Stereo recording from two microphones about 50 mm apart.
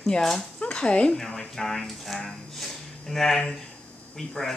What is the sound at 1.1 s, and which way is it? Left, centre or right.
Speech, centre.